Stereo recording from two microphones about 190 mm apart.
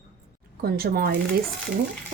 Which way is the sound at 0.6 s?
50° right (ahead or behind).